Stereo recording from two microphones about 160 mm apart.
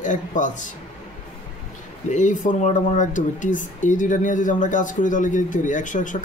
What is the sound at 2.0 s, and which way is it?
Speech, 50° left (ahead or behind).